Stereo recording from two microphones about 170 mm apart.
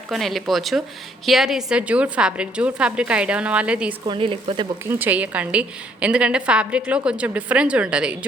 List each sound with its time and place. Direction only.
0.1 s a woman's voice: centre (ahead or behind)
4.0 s speech: 30° right (ahead or behind)
4.9 s a woman's voice: 10° right (ahead or behind)